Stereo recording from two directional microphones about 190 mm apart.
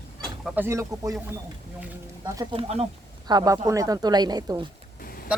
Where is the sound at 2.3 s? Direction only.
25° right (ahead or behind).